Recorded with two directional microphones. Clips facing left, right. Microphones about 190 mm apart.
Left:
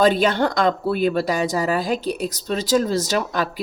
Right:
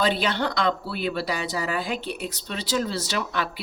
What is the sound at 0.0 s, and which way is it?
Speech, 45° left (ahead or behind).